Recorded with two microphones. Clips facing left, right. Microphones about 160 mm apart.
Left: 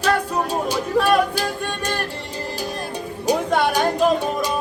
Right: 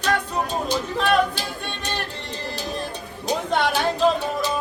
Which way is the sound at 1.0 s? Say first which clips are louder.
Left 3 dB; 40° left (ahead or behind).